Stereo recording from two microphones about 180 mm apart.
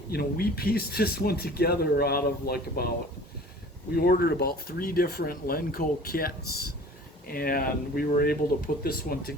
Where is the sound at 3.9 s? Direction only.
60° left (ahead or behind).